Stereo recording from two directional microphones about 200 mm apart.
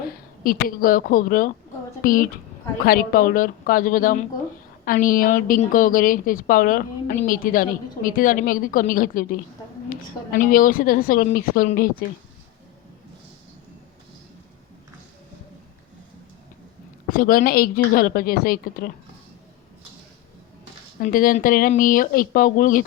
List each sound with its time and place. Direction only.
0.4 s a woman's voice: 45° left (ahead or behind)
17.1 s a woman's voice: 45° left (ahead or behind)
21.0 s a woman's voice: 45° left (ahead or behind)